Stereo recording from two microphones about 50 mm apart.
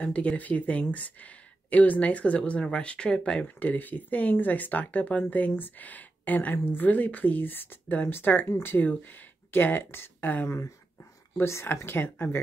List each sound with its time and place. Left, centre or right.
0.0 s speech: left
3.4 s speech: left
11.3 s speech: left